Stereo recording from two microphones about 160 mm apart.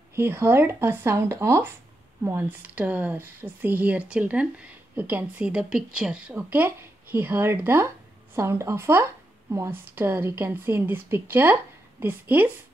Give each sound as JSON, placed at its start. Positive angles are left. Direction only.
{"t": 0.1, "sound": "speech", "side_deg": -15}